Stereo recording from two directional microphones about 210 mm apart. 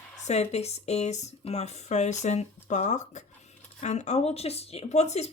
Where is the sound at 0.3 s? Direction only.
30° left (ahead or behind).